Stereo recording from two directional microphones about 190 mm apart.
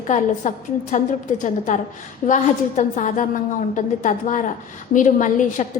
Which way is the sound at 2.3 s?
40° left (ahead or behind).